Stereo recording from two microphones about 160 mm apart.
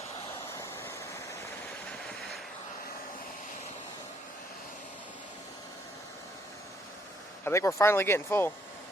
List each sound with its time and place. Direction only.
7.4 s speech: 15° left (ahead or behind)